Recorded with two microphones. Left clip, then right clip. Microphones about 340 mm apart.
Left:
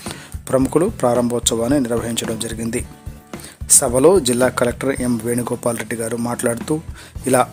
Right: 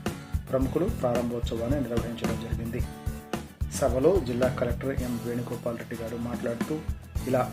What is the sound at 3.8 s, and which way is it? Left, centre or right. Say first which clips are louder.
Speech: left 9 dB; left.